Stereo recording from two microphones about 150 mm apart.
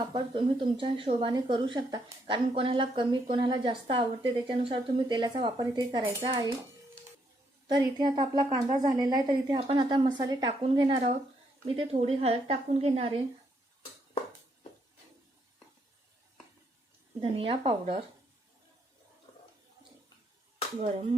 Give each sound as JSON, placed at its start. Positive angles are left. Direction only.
{"t": 0.1, "sound": "a woman's voice", "side_deg": -35}
{"t": 7.7, "sound": "a woman's voice", "side_deg": -30}
{"t": 17.2, "sound": "a woman's voice", "side_deg": -35}